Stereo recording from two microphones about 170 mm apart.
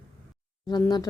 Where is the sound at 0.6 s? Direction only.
25° left (ahead or behind).